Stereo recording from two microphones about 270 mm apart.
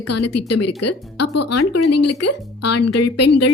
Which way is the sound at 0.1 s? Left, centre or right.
Left.